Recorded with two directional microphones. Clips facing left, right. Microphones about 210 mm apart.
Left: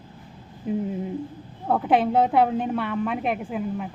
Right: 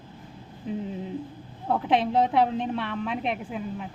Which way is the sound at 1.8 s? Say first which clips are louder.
Left 3 dB; 5° left (ahead or behind).